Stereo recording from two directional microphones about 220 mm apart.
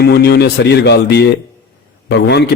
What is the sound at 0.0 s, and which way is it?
A man's voice, 45° left (ahead or behind).